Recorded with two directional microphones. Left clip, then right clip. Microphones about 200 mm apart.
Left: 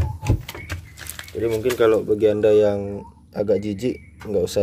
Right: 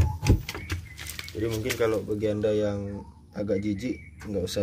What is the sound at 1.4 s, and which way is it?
Speech, 40° left (ahead or behind).